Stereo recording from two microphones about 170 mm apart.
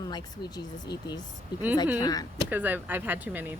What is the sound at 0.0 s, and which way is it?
A woman's voice, 25° left (ahead or behind).